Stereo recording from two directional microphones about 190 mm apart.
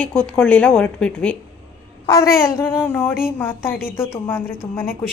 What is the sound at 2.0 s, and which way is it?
A woman's voice, 20° left (ahead or behind).